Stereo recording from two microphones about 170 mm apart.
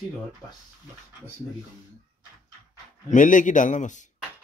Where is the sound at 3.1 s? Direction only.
50° left (ahead or behind).